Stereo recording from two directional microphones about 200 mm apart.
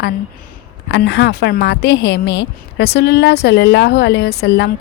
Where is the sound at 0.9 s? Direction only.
60° left (ahead or behind).